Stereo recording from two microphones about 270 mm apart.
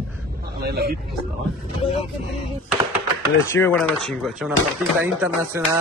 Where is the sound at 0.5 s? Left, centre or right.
Right.